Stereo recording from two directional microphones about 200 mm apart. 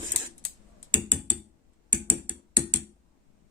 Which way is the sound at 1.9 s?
25° right (ahead or behind).